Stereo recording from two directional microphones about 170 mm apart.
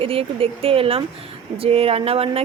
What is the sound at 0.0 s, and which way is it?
A woman's voice, 35° right (ahead or behind).